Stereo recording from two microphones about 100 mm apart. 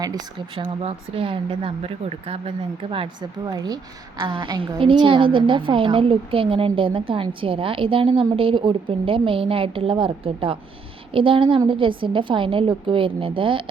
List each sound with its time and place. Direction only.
0.5 s speech: 80° right
2.9 s a woman's voice: 65° right (ahead or behind)
3.4 s speech: 40° right (ahead or behind)
4.2 s a woman's voice: 55° right (ahead or behind)